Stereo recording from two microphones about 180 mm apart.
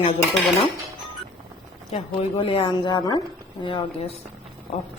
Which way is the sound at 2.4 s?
30° left (ahead or behind).